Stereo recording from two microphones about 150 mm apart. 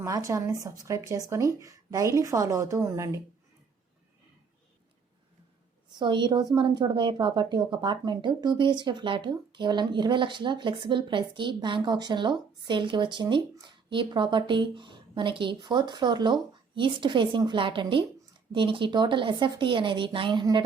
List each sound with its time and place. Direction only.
0.0 s speech: 20° right (ahead or behind)
5.9 s a woman's voice: 30° right (ahead or behind)